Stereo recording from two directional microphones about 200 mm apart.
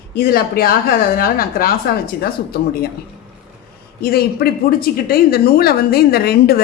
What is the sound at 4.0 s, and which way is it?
A woman's voice, 50° left (ahead or behind).